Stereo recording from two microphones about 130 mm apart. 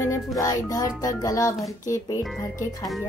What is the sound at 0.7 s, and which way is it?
Speech, 25° left (ahead or behind).